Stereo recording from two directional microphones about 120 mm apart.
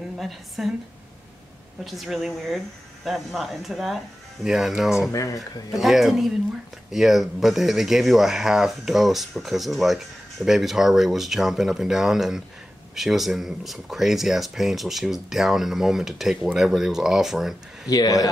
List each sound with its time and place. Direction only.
0.2 s speech: centre (ahead or behind)
1.9 s speech: centre (ahead or behind)
5.1 s speech: 25° left (ahead or behind)
5.7 s speech: centre (ahead or behind)
17.8 s speech: 30° left (ahead or behind)